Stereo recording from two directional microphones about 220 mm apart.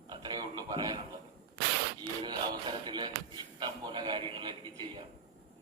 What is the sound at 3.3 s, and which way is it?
Music, 20° right (ahead or behind).